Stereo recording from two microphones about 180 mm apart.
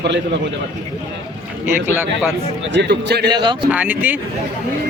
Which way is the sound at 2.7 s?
70° right (ahead or behind).